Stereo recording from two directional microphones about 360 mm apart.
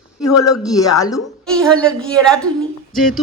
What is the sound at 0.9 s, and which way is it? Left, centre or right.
A woman's voice, centre.